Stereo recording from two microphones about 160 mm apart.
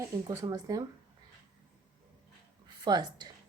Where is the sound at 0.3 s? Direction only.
20° right (ahead or behind).